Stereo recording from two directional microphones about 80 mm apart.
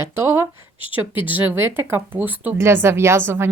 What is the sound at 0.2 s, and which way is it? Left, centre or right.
Speech, right.